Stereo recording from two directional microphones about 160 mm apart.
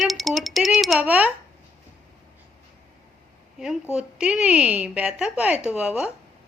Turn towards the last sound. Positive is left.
turn(degrees=-10)  # may be behind; listen again after turning